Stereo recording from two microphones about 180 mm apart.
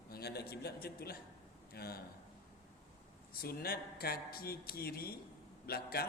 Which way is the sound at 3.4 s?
60° left (ahead or behind).